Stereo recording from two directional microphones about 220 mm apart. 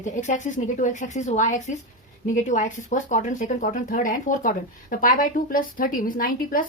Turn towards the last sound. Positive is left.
turn(degrees=40)  # may be behind; listen again after turning